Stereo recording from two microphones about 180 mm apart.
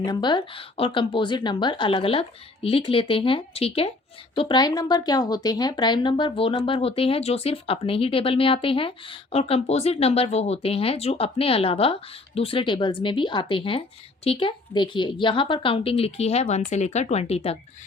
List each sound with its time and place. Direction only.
0.0 s a woman's voice: 25° left (ahead or behind)